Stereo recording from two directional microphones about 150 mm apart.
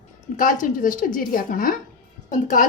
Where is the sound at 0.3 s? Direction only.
60° left (ahead or behind).